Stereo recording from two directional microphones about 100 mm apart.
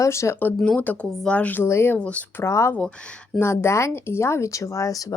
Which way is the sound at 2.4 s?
30° left (ahead or behind).